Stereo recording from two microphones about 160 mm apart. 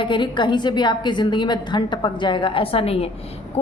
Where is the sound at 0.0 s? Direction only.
30° left (ahead or behind).